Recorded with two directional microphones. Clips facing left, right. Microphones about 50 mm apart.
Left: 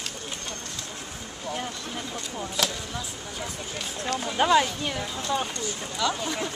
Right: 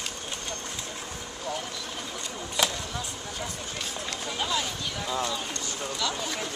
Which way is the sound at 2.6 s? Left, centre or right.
Centre.